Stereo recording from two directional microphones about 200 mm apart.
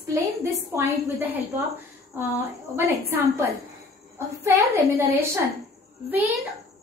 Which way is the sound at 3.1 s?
10° right (ahead or behind).